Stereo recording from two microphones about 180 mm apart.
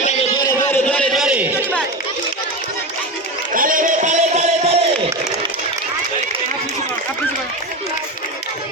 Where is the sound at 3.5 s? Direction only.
50° right (ahead or behind).